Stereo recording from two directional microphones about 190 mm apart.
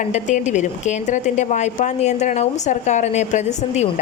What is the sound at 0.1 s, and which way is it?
A woman's voice, 40° left (ahead or behind).